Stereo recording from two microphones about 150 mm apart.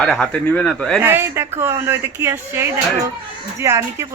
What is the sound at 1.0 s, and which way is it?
Speech, 15° right (ahead or behind).